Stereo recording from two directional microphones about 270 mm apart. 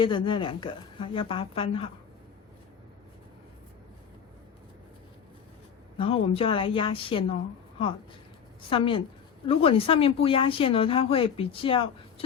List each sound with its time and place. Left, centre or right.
0.0 s speech: centre
6.0 s speech: left
8.7 s speech: centre